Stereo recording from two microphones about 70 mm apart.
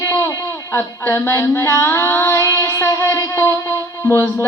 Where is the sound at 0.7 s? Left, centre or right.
Left.